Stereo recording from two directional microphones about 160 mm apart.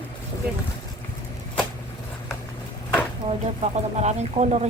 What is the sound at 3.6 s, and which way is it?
A woman's voice, 45° right (ahead or behind).